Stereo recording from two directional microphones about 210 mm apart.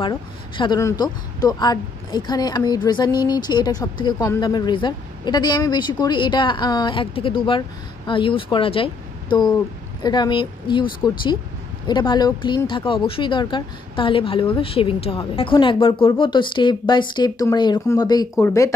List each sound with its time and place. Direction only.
0.0 s speech: 20° left (ahead or behind)